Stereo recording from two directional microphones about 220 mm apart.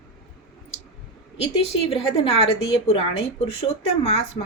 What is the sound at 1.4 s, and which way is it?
A woman's voice, 25° left (ahead or behind).